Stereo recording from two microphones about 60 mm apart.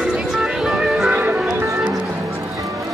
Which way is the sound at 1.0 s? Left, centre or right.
Right.